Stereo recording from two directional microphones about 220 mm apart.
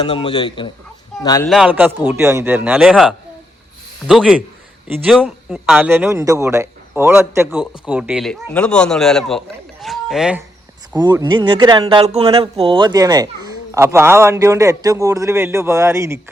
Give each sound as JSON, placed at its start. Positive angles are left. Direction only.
{"t": 0.0, "sound": "a man's voice", "side_deg": 25}
{"t": 1.5, "sound": "speech", "side_deg": -5}
{"t": 9.8, "sound": "a sound", "side_deg": 0}
{"t": 10.9, "sound": "speech", "side_deg": -15}